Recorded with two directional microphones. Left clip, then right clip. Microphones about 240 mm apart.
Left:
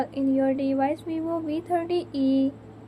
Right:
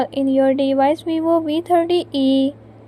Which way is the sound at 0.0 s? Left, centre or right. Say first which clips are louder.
Right 8 dB; right.